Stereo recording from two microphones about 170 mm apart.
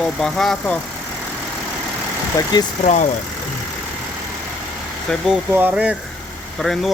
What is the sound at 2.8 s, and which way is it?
Speech, 45° left (ahead or behind).